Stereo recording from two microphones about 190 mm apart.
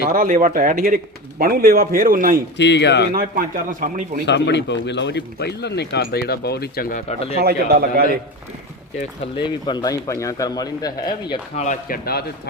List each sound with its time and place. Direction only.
0.1 s a man's voice: 50° right (ahead or behind)
2.6 s a man's voice: 65° left (ahead or behind)
3.2 s a man's voice: 50° right (ahead or behind)
4.3 s a man's voice: 65° left (ahead or behind)
7.4 s a man's voice: 55° right (ahead or behind)
9.3 s speech: 25° left (ahead or behind)
11.5 s speech: 40° left (ahead or behind)